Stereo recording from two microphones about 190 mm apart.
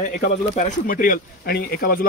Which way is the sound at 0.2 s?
45° left (ahead or behind).